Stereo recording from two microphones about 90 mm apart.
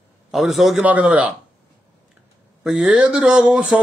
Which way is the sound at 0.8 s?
15° right (ahead or behind).